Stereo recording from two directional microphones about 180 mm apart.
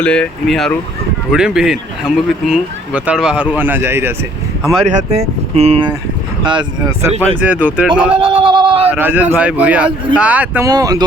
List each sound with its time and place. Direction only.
0.0 s speech: 5° left (ahead or behind); by 4.1 s 15° right (ahead or behind)
4.9 s speech: 40° right (ahead or behind)
7.4 s speech: 10° right (ahead or behind)
8.2 s speech: 30° right (ahead or behind)
8.8 s speech: 10° right (ahead or behind)
10.7 s speech: 20° right (ahead or behind)